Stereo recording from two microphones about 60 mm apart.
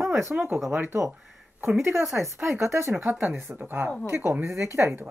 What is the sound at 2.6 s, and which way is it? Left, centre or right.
Speech, right.